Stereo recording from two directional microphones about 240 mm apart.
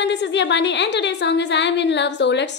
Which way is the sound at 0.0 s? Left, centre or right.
Left.